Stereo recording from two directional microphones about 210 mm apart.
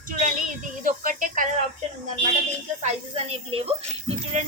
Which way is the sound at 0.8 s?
40° right (ahead or behind).